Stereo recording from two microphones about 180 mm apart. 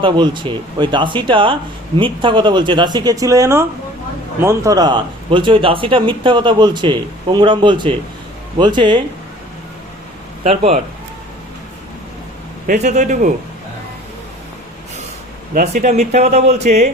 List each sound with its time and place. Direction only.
0.0 s speech: 25° right (ahead or behind)
10.4 s speech: 35° right (ahead or behind)
12.6 s a man's voice: 40° right (ahead or behind)
15.5 s speech: 40° right (ahead or behind)